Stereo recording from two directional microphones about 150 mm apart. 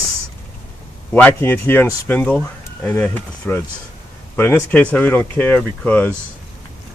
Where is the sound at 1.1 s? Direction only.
10° left (ahead or behind).